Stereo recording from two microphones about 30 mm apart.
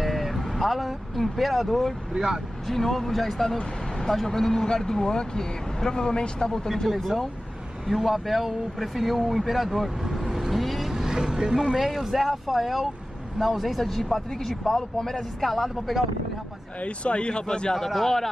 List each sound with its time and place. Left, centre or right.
0.0 s vehicle: centre
1.1 s speech: centre
2.1 s speech: right
2.7 s speech: centre; by 6.5 s left
7.8 s speech: centre
10.5 s vehicle: centre
10.9 s speech: centre
11.8 s speech: centre
15.4 s speech: centre
16.8 s speech: left
17.7 s speech: centre